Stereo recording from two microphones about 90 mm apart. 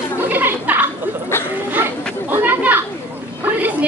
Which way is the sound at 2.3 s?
25° right (ahead or behind).